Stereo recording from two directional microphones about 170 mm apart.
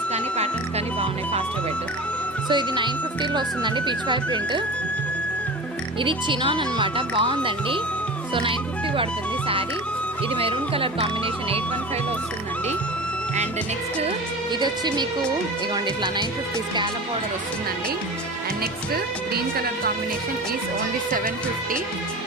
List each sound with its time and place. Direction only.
2.5 s speech: 25° right (ahead or behind)
6.0 s speech: 30° right (ahead or behind)
10.3 s speech: 30° right (ahead or behind)
14.6 s speech: 25° right (ahead or behind)
19.3 s speech: 65° right (ahead or behind)